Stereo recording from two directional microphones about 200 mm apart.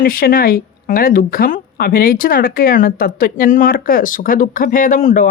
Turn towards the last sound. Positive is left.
turn(degrees=40)  # may be behind; listen again after turning